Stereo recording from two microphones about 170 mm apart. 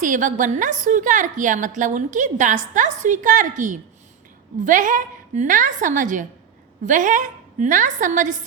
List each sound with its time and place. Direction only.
0.0 s a woman's voice: 50° right (ahead or behind)